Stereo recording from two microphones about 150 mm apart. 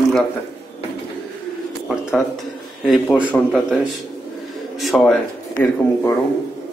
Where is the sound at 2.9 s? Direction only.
5° right (ahead or behind).